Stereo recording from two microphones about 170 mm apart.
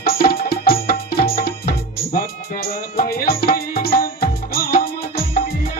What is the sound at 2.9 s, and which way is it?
Music, 60° left (ahead or behind).